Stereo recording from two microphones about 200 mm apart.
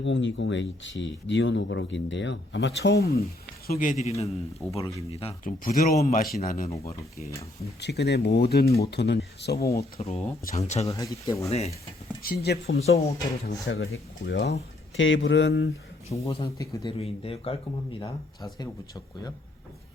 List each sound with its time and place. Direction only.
0.0 s a man's voice: 65° left (ahead or behind); by 5.5 s 30° left (ahead or behind)
5.6 s a man's voice: 45° left (ahead or behind)
6.7 s speech: 15° left (ahead or behind)
7.8 s speech: 55° left (ahead or behind)
10.0 s a man's voice: 30° left (ahead or behind)
10.8 s speech: 15° left (ahead or behind)
11.4 s a man's voice: 30° left (ahead or behind)
12.2 s speech: 50° left (ahead or behind)
12.8 s a man's voice: 35° left (ahead or behind)
13.7 s speech: 55° left (ahead or behind)
16.2 s speech: 30° left (ahead or behind)
16.6 s speech: 15° left (ahead or behind)
17.0 s speech: 30° left (ahead or behind)
18.6 s speech: 20° left (ahead or behind)